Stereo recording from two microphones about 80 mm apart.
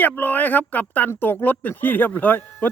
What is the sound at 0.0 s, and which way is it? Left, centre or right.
Speech, left.